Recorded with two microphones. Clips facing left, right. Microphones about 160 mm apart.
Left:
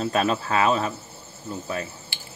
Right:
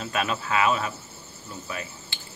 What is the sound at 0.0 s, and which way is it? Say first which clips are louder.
Speech: left 5 dB; 35° left (ahead or behind).